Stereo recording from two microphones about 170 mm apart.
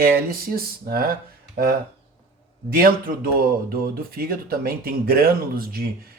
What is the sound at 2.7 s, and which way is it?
Speech, 60° right (ahead or behind).